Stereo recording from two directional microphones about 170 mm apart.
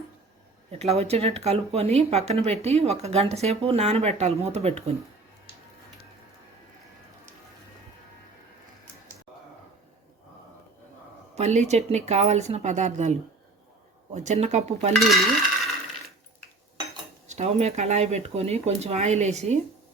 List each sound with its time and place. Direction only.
0.7 s speech: 35° right (ahead or behind)
11.3 s speech: 40° right (ahead or behind)
14.9 s a sound: centre (ahead or behind)
17.2 s speech: 40° right (ahead or behind)